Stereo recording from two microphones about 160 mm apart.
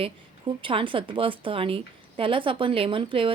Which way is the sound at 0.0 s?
35° right (ahead or behind).